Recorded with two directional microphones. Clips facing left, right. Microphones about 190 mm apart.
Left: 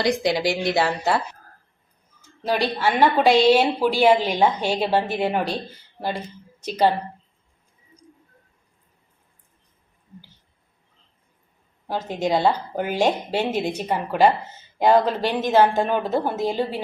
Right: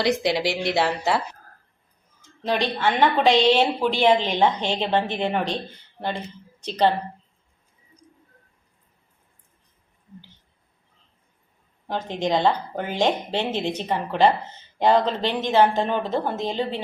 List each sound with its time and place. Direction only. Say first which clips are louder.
0.0 s a woman's voice: left 1 dB; centre (ahead or behind)
2.4 s a woman's voice: left 1 dB; 10° left (ahead or behind)
11.9 s speech: left 1 dB; 10° left (ahead or behind)